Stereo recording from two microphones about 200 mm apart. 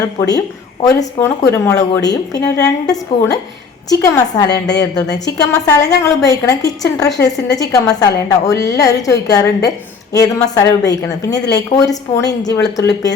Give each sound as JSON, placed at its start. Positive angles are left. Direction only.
{"t": 0.2, "sound": "speech", "side_deg": 20}